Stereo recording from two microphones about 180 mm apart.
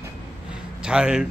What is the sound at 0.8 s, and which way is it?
Speech, 5° right (ahead or behind).